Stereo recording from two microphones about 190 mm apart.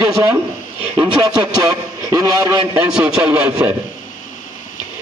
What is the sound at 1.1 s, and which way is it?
A man's voice, 20° right (ahead or behind).